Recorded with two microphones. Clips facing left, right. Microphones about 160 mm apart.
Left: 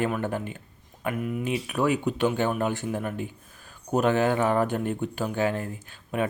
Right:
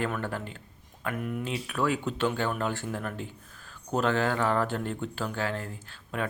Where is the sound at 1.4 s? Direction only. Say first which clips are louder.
Left 4 dB; 15° left (ahead or behind).